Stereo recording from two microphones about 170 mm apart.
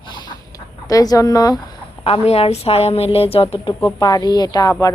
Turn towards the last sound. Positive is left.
turn(degrees=20)  # may be behind; listen again after turning